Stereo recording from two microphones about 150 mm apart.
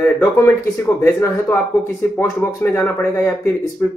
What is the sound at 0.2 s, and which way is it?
Speech, 20° left (ahead or behind).